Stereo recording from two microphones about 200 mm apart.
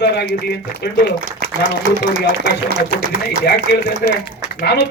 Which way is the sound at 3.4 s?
55° left (ahead or behind).